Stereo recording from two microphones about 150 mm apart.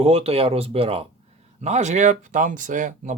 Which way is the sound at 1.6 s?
50° right (ahead or behind).